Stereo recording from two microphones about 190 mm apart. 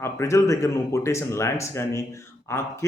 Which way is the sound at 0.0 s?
15° left (ahead or behind).